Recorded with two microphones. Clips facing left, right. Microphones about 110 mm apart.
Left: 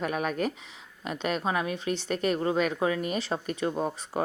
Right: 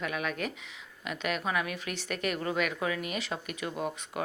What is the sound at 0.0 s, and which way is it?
A woman's voice, 40° left (ahead or behind).